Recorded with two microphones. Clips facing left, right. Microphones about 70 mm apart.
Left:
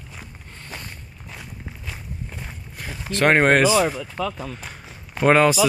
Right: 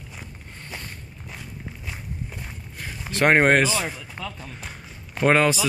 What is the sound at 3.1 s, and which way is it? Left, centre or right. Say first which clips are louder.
Speech: left 1 dB; centre.